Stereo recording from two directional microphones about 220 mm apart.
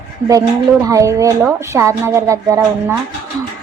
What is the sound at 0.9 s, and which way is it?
A woman's voice, 15° right (ahead or behind).